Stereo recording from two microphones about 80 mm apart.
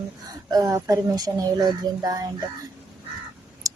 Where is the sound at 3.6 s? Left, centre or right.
Right.